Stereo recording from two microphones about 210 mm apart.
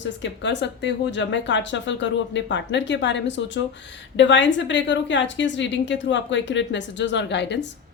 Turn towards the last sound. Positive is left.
turn(degrees=55)  # may be behind; listen again after turning